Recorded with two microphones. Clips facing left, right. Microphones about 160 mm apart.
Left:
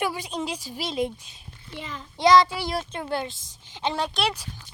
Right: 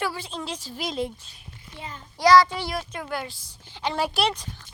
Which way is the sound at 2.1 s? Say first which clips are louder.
Right 1 dB; 25° left (ahead or behind).